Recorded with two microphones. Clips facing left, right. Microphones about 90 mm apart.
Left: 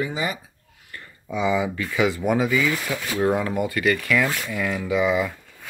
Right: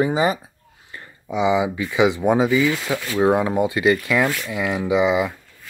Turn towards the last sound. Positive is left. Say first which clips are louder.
# right 3 dB
turn(degrees=-15)  # may be behind; listen again after turning